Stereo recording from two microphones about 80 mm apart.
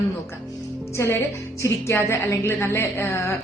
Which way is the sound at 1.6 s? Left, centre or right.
Left.